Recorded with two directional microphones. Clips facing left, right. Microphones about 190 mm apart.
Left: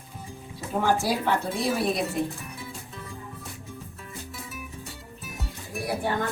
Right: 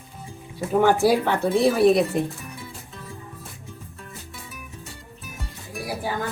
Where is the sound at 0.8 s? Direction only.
60° right (ahead or behind).